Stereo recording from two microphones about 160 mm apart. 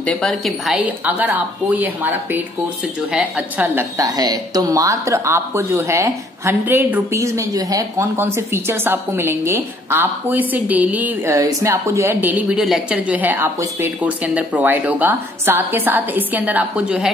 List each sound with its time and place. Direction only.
0.0 s speech: 5° left (ahead or behind); by 3.8 s 10° right (ahead or behind)
4.0 s speech: 25° right (ahead or behind); by 17.1 s 5° right (ahead or behind)